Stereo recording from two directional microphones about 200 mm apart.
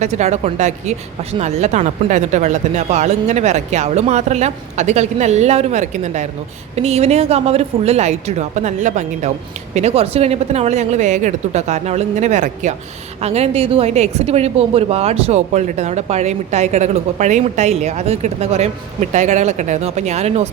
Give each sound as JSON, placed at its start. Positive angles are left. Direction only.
{"t": 0.0, "sound": "a woman's voice", "side_deg": -35}